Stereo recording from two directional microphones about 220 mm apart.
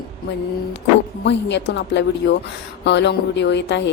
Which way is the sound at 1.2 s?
50° left (ahead or behind).